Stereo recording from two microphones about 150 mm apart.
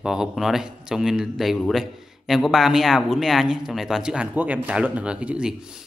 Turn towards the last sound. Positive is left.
turn(degrees=-5)  # may be behind; listen again after turning